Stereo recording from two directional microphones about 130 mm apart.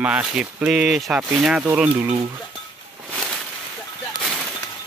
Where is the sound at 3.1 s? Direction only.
5° right (ahead or behind).